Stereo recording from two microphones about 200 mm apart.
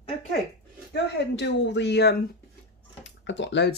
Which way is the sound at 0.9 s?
55° left (ahead or behind).